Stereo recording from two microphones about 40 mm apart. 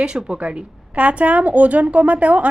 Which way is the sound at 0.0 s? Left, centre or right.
Right.